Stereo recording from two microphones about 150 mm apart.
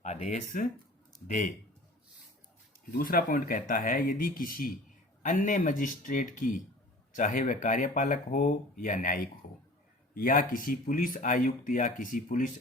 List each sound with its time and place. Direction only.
0.0 s speech: 50° left (ahead or behind)
3.0 s speech: 70° left (ahead or behind)
5.2 s speech: 60° left (ahead or behind)